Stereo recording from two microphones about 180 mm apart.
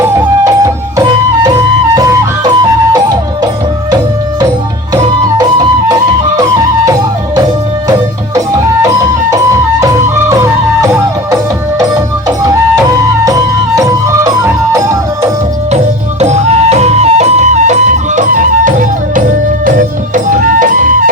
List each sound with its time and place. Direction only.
0.0 s music: 15° right (ahead or behind)
5.4 s music: 20° right (ahead or behind)
16.2 s music: 35° right (ahead or behind)
20.1 s music: 45° right (ahead or behind)